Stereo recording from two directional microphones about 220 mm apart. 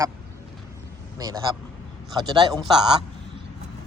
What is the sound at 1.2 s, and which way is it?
Speech, 15° right (ahead or behind).